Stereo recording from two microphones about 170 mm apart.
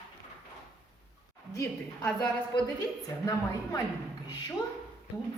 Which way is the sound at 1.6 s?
10° left (ahead or behind).